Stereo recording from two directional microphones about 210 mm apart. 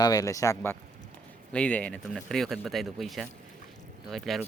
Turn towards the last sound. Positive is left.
turn(degrees=0)  # may be behind; listen again after turning